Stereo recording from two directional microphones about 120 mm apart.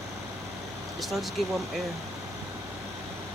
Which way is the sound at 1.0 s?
Centre (ahead or behind).